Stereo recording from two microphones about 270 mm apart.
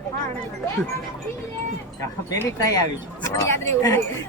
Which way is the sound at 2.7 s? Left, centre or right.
Centre.